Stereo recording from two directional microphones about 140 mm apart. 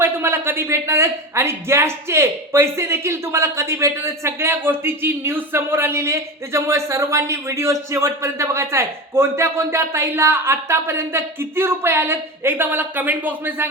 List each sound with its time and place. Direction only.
0.0 s speech: 15° right (ahead or behind)